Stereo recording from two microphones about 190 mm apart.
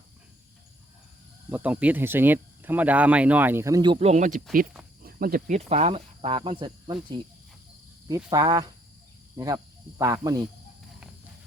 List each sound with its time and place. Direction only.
1.5 s speech: 10° right (ahead or behind)
3.9 s speech: 35° right (ahead or behind)
5.0 s speech: 50° right (ahead or behind)
5.5 s speech: 35° right (ahead or behind)
10.0 s speech: 20° right (ahead or behind)